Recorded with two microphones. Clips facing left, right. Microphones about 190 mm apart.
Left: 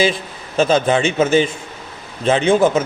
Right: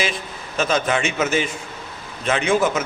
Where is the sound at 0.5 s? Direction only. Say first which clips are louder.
Left 6 dB; 30° left (ahead or behind).